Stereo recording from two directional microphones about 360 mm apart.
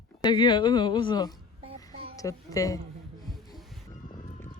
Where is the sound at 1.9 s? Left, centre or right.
Centre.